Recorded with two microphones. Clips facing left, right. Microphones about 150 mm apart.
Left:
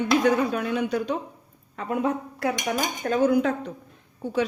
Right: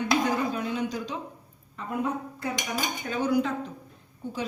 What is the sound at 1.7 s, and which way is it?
Speech, 80° left.